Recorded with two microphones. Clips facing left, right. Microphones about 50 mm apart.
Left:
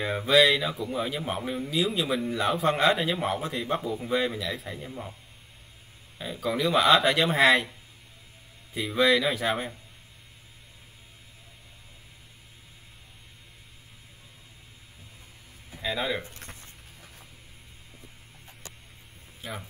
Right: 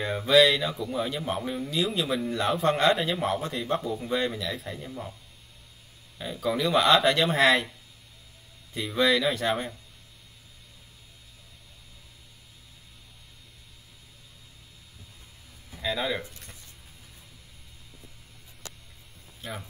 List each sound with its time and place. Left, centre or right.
0.0 s speech: centre
6.1 s speech: centre
8.7 s speech: centre
15.7 s a sound: centre
16.3 s a sound: left
19.4 s speech: centre